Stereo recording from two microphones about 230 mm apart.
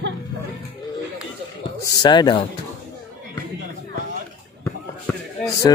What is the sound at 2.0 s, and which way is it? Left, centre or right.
Speech, centre.